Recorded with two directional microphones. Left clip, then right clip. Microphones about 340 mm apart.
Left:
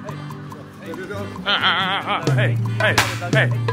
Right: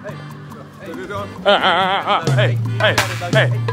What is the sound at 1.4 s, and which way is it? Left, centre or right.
Speech, centre.